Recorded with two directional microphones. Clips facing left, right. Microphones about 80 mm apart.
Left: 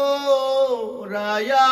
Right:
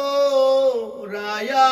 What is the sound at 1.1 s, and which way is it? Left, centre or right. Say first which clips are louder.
Mantra: left 6 dB; left.